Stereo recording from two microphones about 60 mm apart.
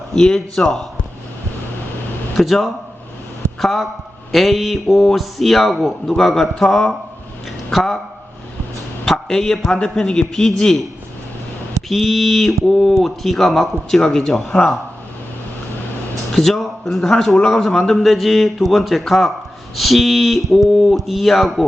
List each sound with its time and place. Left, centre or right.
0.1 s a man's voice: centre
2.4 s a man's voice: centre
9.0 s a man's voice: centre
11.9 s a man's voice: centre
16.3 s a man's voice: centre